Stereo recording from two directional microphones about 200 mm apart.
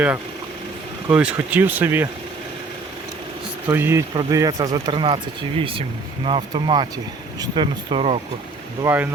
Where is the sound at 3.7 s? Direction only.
10° right (ahead or behind).